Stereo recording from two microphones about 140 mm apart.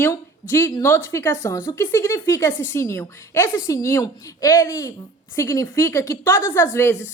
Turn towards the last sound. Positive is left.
turn(degrees=15)  # may be behind; listen again after turning